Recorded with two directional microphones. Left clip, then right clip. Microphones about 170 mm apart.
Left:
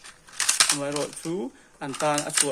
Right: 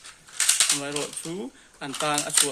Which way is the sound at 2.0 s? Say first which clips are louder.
Left 1 dB; 65° left (ahead or behind).